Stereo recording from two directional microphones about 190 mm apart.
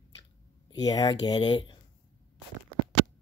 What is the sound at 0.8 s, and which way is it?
Speech, 20° left (ahead or behind).